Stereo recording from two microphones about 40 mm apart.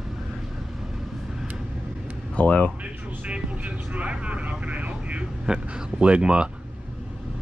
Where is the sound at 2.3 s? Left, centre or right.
Left.